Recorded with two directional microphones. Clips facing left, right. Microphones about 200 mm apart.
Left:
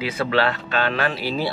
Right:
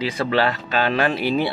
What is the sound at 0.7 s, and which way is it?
Speech, 10° right (ahead or behind).